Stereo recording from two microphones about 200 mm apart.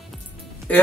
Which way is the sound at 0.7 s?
5° left (ahead or behind).